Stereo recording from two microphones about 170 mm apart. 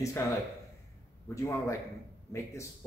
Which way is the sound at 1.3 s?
20° left (ahead or behind).